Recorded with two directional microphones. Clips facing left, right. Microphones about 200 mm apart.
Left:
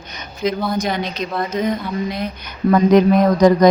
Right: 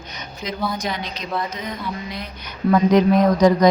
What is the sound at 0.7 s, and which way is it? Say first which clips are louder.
A woman's voice: left 6 dB; 50° left (ahead or behind).